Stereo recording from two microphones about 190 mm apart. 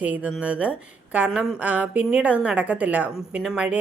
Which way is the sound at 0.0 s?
10° right (ahead or behind).